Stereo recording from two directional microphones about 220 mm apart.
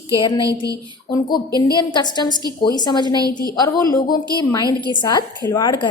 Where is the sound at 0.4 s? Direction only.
15° right (ahead or behind).